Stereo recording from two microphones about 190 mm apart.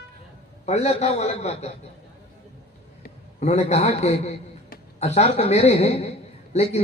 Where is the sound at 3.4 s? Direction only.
35° left (ahead or behind).